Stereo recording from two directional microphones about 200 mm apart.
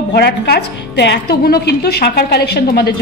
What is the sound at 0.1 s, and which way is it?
A woman's voice, 55° left (ahead or behind).